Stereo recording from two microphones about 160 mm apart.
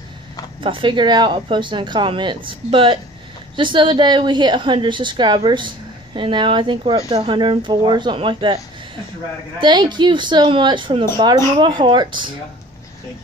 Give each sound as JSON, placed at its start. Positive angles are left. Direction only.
{"t": 0.7, "sound": "a woman's voice", "side_deg": -30}
{"t": 9.6, "sound": "speech", "side_deg": -30}